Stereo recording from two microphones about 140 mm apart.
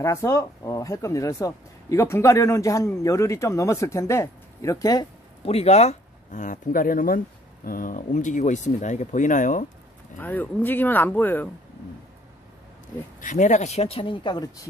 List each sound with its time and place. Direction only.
0.0 s speech: 20° left (ahead or behind)
5.4 s speech: 50° left (ahead or behind); by 9.7 s 65° left (ahead or behind)
10.1 s speech: 15° left (ahead or behind)
13.2 s speech: 60° left (ahead or behind); by 14.7 s 30° left (ahead or behind)